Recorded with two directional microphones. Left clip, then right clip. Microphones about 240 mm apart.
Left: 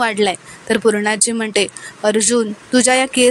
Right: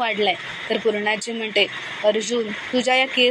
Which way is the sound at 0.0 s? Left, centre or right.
Left.